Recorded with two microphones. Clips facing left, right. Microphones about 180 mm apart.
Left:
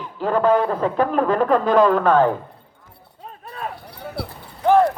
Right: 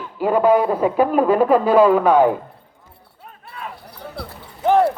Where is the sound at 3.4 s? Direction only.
40° left (ahead or behind).